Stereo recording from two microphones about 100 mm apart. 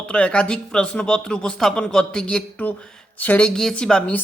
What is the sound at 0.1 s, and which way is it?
Speech, 10° left (ahead or behind).